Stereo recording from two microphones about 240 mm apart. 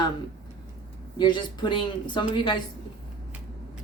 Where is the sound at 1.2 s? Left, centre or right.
Centre.